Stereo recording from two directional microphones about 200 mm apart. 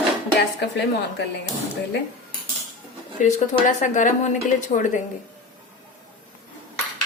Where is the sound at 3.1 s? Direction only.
40° left (ahead or behind).